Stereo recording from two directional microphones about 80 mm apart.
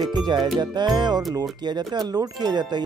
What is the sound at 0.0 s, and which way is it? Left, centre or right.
Speech, right.